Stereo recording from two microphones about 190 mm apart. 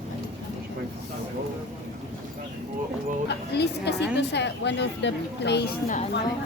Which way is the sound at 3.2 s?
60° left (ahead or behind).